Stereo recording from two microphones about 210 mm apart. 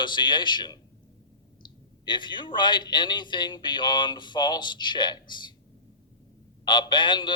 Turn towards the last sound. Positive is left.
turn(degrees=20)  # may be behind; listen again after turning